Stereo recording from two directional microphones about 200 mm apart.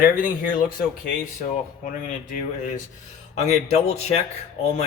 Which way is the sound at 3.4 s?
35° left (ahead or behind).